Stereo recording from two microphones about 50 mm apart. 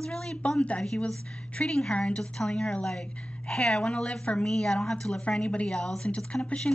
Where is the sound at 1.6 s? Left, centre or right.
Centre.